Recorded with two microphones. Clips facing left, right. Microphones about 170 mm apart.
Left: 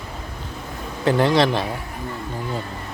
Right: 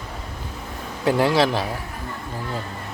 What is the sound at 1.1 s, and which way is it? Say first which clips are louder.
Speech: left 1 dB; 5° right (ahead or behind).